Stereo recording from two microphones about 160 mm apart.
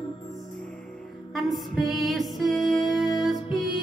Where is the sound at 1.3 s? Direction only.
Centre (ahead or behind).